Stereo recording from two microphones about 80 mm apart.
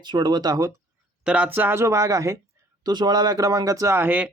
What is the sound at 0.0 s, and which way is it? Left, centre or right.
Speech, right.